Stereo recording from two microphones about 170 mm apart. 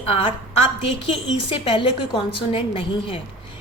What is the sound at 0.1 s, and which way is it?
A woman's voice, 30° left (ahead or behind).